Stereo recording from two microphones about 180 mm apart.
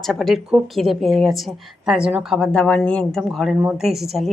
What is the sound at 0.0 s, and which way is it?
A woman's voice, centre (ahead or behind).